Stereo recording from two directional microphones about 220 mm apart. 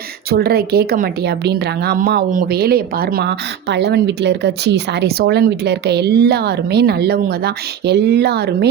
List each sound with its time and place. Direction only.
0.3 s speech: 45° right (ahead or behind)